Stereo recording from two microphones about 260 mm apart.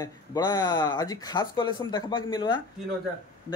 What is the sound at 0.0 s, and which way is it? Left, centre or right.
Speech, centre.